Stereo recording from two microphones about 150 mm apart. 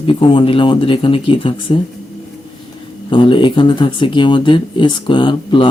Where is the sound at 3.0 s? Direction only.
35° left (ahead or behind).